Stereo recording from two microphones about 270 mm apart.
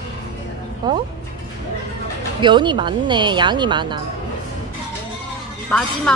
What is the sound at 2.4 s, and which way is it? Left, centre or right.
A woman's voice, centre.